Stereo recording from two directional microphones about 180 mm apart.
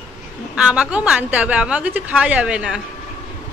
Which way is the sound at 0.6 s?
5° right (ahead or behind).